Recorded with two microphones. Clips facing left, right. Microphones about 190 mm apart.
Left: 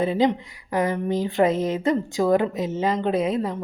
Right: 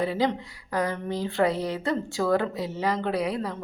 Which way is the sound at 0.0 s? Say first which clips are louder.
Left 5 dB; 20° left (ahead or behind).